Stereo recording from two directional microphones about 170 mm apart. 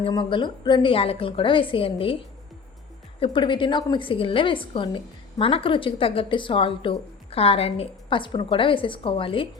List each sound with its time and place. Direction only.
0.0 s a woman's voice: 30° left (ahead or behind)
3.2 s a woman's voice: 30° left (ahead or behind)